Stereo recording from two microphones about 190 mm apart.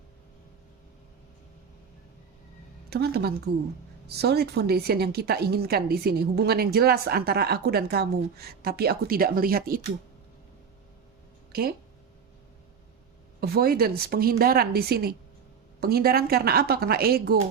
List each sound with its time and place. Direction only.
2.9 s a woman's voice: 55° right (ahead or behind)
13.4 s a woman's voice: 55° right (ahead or behind)